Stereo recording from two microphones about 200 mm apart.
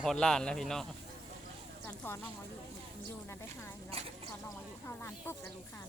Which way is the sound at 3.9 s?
30° right (ahead or behind).